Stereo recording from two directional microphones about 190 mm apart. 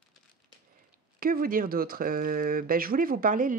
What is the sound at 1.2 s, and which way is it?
Speech, 50° right (ahead or behind).